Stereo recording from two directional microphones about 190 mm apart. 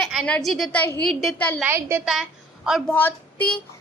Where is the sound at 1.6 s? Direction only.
10° right (ahead or behind).